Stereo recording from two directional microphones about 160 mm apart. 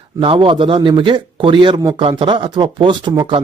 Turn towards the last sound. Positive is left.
turn(degrees=-30)  # may be behind; listen again after turning